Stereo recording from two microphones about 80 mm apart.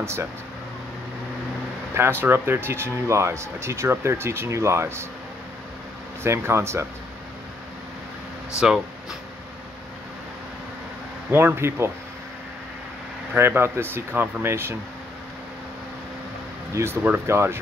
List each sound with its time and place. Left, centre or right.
0.0 s speech: right
2.0 s speech: right
6.2 s speech: right
8.5 s speech: centre
11.3 s speech: right
13.3 s speech: right
16.8 s speech: right